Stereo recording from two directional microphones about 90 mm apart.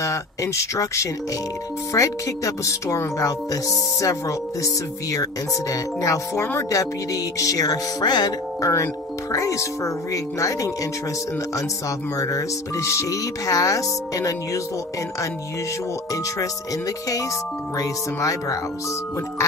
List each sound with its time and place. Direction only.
0.0 s speech: 35° left (ahead or behind)
6.8 s speech: 40° left (ahead or behind)
8.6 s speech: 35° left (ahead or behind)
12.2 s speech: 35° left (ahead or behind)
17.7 s speech: 40° left (ahead or behind)